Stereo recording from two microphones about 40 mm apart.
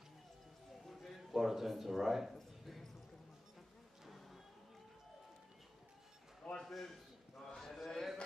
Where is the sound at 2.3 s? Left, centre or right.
Centre.